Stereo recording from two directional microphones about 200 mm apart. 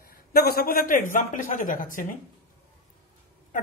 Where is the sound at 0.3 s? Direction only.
50° left (ahead or behind).